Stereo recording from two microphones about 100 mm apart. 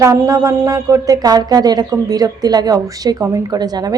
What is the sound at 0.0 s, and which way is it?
Speech, 35° right (ahead or behind).